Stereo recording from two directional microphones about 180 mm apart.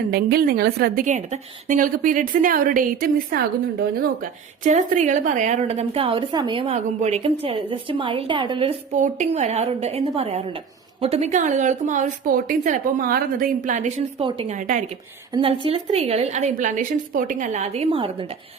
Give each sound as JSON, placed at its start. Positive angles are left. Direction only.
{"t": 0.1, "sound": "a woman's voice", "side_deg": -60}
{"t": 14.3, "sound": "a woman's voice", "side_deg": -30}
{"t": 14.5, "sound": "a woman's voice", "side_deg": -45}
{"t": 15.3, "sound": "a woman's voice", "side_deg": -30}